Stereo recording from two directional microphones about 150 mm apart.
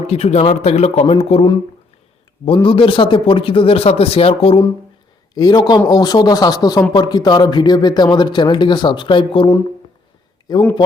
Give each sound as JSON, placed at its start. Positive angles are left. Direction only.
{"t": 0.1, "sound": "speech", "side_deg": 45}
{"t": 2.6, "sound": "speech", "side_deg": 35}
{"t": 5.3, "sound": "a man's voice", "side_deg": 25}
{"t": 10.5, "sound": "a man's voice", "side_deg": 25}